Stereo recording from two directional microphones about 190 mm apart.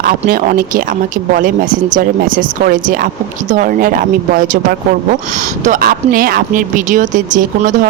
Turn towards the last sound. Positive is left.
turn(degrees=-45)  # may be behind; listen again after turning